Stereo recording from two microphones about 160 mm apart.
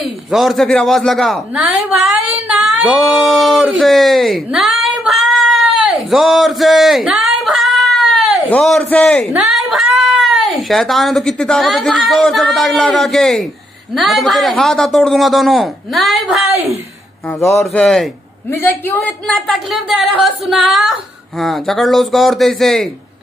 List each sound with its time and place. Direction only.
0.0 s speech: centre (ahead or behind)
9.3 s a woman's voice: 5° right (ahead or behind)
17.3 s speech: 15° left (ahead or behind)
17.6 s a woman's voice: 5° left (ahead or behind)
18.5 s a woman's voice: 15° left (ahead or behind)